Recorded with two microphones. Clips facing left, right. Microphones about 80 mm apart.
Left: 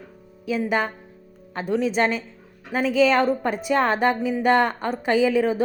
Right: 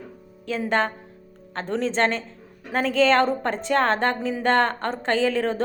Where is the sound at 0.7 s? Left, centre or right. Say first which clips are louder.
Right 1 dB; centre.